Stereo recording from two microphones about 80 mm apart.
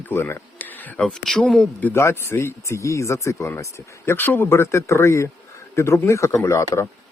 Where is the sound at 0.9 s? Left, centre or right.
Centre.